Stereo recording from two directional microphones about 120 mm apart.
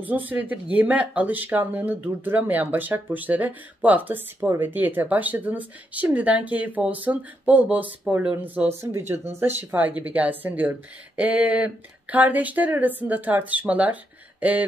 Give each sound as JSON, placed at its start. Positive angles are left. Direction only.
{"t": 0.0, "sound": "speech", "side_deg": -15}